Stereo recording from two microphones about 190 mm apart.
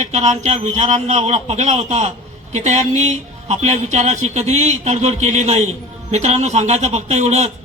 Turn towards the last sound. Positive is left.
turn(degrees=-35)  # may be behind; listen again after turning